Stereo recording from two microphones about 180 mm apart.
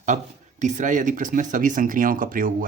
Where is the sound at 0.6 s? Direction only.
45° right (ahead or behind).